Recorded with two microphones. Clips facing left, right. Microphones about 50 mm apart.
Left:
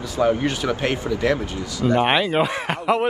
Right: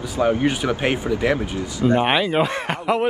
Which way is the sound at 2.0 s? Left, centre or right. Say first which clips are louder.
Left 2 dB; centre.